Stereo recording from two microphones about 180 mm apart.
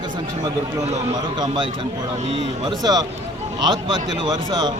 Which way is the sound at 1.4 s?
25° right (ahead or behind).